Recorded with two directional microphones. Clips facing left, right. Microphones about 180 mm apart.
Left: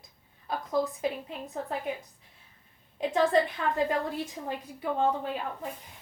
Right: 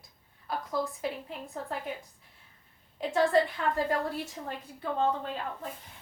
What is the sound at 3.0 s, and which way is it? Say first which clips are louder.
A woman's voice: left 1 dB; 20° left (ahead or behind).